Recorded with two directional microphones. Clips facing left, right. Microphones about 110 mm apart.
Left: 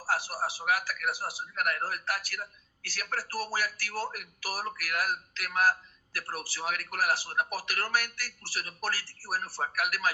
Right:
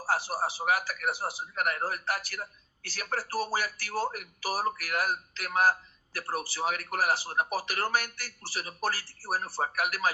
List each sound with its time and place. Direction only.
0.0 s speech: 25° right (ahead or behind)